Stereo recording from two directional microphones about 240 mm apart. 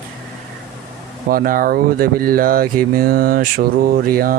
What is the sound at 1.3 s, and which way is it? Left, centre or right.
Speech, right.